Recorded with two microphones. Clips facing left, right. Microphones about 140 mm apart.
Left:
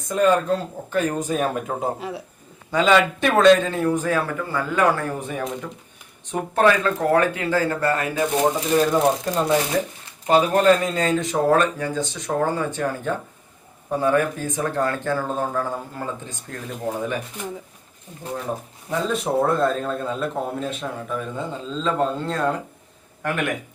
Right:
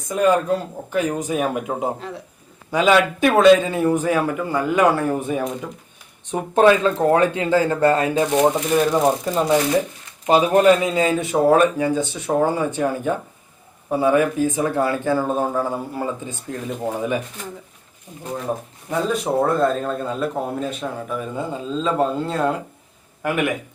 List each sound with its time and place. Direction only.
0.1 s a man's voice: 5° right (ahead or behind)
2.0 s speech: 10° left (ahead or behind)
2.7 s a man's voice: 10° right (ahead or behind)
8.9 s a man's voice: 5° right (ahead or behind)
10.2 s a man's voice: 15° right (ahead or behind)
18.9 s a man's voice: centre (ahead or behind)